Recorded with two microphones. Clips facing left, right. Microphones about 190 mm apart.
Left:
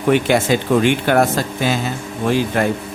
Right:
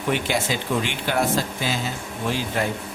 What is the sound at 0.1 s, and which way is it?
Speech, 60° left (ahead or behind).